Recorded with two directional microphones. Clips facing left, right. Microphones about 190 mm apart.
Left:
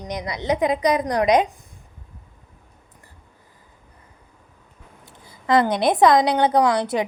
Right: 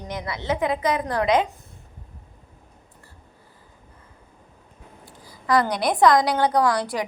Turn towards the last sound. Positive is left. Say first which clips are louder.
# left 3 dB
turn(degrees=20)  # may be behind; listen again after turning